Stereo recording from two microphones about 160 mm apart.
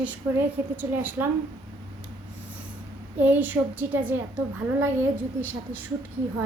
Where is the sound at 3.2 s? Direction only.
10° right (ahead or behind).